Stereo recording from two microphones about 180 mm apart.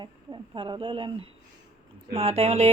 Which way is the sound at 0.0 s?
25° right (ahead or behind).